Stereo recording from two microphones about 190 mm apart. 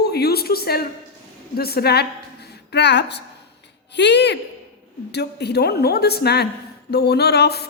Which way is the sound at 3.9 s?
65° left (ahead or behind).